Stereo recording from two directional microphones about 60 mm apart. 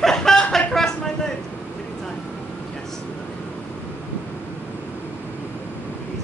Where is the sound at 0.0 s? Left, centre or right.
Centre.